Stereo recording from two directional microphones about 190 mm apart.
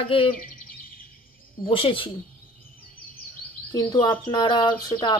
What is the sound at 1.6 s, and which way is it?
Speech, 25° left (ahead or behind).